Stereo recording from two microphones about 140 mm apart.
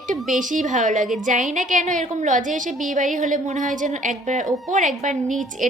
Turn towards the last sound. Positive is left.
turn(degrees=-65)  # may be behind; listen again after turning